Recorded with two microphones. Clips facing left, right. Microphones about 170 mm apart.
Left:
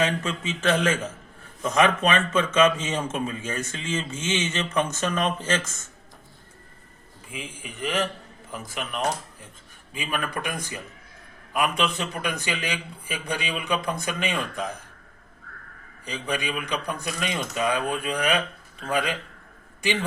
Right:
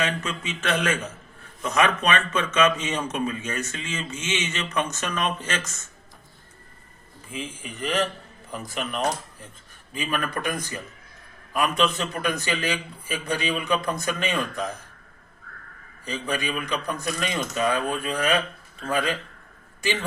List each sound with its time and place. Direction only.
0.0 s a man's voice: 30° left (ahead or behind)
7.3 s speech: 10° left (ahead or behind)
16.0 s speech: 15° left (ahead or behind)